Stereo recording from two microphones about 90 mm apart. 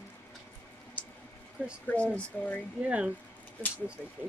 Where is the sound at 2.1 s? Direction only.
15° left (ahead or behind).